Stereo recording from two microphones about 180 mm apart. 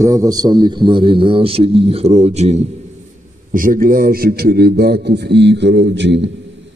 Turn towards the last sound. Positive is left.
turn(degrees=-85)